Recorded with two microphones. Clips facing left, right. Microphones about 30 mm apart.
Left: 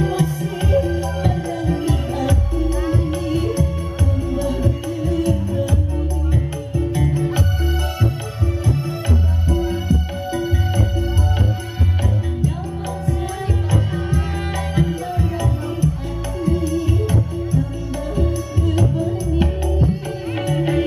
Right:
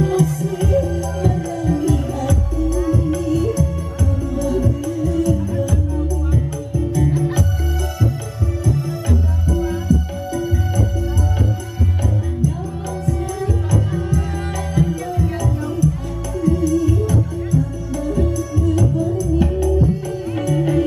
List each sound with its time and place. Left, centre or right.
0.0 s music: left
8.6 s music: left
13.7 s music: left